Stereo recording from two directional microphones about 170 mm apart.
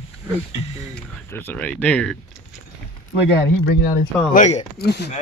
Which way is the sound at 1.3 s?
10° left (ahead or behind).